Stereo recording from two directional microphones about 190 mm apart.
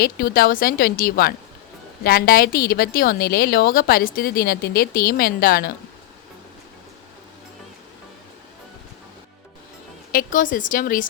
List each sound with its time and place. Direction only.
0.0 s a woman's voice: 50° left (ahead or behind)
10.1 s a woman's voice: 45° left (ahead or behind)